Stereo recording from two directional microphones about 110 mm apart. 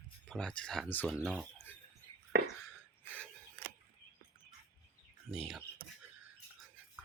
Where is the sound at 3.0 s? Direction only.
15° left (ahead or behind).